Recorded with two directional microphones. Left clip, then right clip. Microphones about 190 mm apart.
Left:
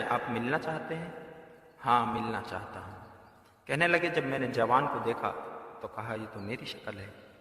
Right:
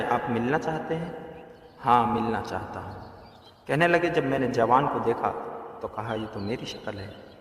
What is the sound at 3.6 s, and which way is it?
A man's voice, 20° left (ahead or behind).